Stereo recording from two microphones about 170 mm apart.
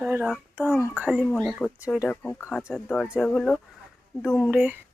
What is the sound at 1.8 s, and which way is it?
Speech, 10° right (ahead or behind).